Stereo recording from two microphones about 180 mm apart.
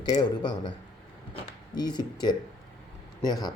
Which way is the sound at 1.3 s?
25° left (ahead or behind).